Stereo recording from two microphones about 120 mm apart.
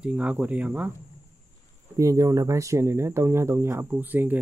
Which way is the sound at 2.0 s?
25° right (ahead or behind).